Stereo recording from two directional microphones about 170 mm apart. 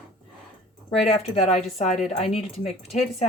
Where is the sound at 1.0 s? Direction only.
35° left (ahead or behind).